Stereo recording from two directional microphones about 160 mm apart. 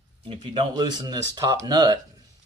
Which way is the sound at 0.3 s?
35° right (ahead or behind).